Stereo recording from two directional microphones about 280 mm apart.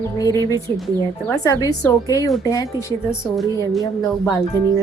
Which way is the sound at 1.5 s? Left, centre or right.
Centre.